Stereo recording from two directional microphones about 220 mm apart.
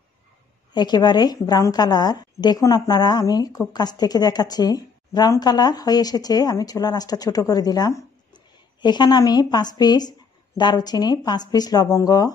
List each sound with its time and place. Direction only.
0.7 s a woman's voice: 20° left (ahead or behind)